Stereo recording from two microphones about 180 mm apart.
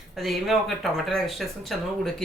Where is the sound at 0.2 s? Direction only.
Centre (ahead or behind).